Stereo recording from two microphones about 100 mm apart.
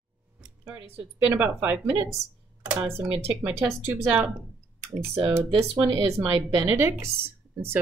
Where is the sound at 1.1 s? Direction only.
15° right (ahead or behind).